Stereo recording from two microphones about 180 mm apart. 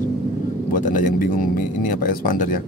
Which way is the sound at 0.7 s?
45° left (ahead or behind).